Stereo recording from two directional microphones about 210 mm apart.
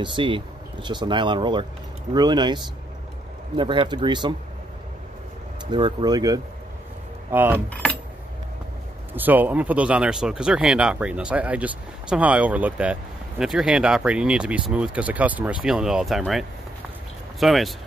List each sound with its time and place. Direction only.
0.0 s speech: 25° right (ahead or behind)
5.7 s speech: 20° right (ahead or behind)
7.5 s speech: 5° left (ahead or behind)
9.1 s speech: 10° right (ahead or behind)